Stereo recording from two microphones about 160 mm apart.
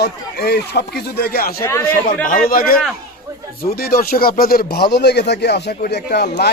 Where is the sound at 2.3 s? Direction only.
65° left (ahead or behind).